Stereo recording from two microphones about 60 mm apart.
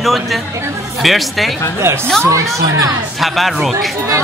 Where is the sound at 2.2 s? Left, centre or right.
Right.